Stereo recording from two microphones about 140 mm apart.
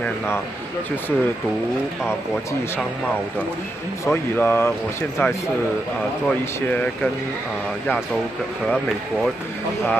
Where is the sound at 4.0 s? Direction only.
15° left (ahead or behind).